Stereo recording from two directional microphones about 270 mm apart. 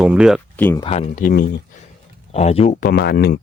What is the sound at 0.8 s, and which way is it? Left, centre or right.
Speech, left.